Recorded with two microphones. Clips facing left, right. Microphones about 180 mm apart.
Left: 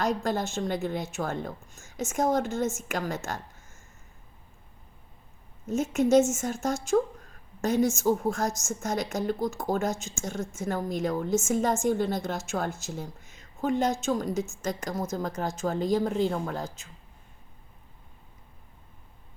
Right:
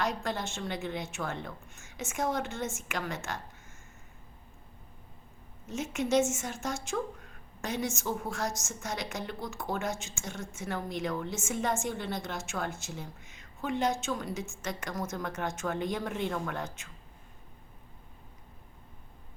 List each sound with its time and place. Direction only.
0.0 s speech: 45° left (ahead or behind)
5.6 s speech: 45° left (ahead or behind)
13.0 s a sound: 45° left (ahead or behind)
14.0 s speech: 40° left (ahead or behind)